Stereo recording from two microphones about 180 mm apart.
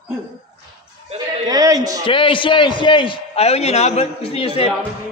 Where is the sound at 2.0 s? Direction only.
30° left (ahead or behind).